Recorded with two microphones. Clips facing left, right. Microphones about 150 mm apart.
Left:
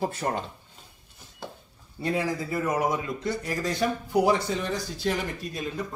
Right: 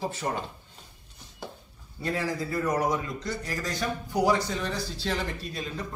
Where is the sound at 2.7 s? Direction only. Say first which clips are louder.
Even; 5° left (ahead or behind).